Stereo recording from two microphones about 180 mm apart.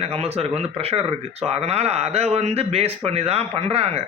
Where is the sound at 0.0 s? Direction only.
35° right (ahead or behind).